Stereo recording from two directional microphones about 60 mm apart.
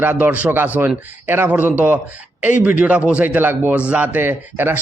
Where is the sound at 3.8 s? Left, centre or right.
Right.